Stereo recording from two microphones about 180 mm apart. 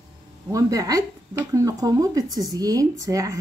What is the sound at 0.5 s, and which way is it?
Speech, 20° right (ahead or behind).